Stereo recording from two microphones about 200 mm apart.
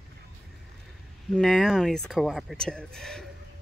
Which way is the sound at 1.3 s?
Centre (ahead or behind).